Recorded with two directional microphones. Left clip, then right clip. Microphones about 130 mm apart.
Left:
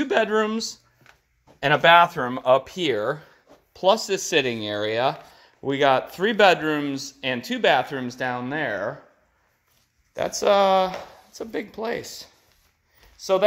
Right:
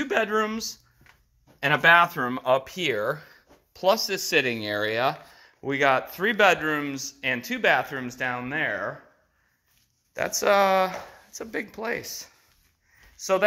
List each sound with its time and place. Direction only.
0.0 s speech: 45° left (ahead or behind)
3.2 s a sound: 20° left (ahead or behind)
3.8 s speech: 35° left (ahead or behind)
6.3 s speech: 50° left (ahead or behind)
10.1 s speech: 25° left (ahead or behind)